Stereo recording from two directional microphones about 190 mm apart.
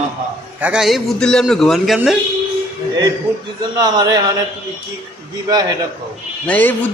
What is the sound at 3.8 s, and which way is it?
Speech, 20° right (ahead or behind).